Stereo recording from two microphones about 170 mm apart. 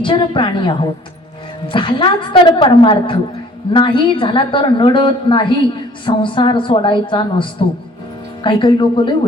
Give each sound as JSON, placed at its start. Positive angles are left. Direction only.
{"t": 0.0, "sound": "a woman's voice", "side_deg": 30}